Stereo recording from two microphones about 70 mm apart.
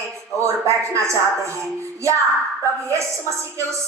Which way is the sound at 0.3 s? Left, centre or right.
Right.